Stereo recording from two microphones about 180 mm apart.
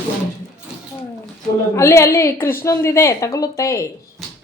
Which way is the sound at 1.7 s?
15° left (ahead or behind).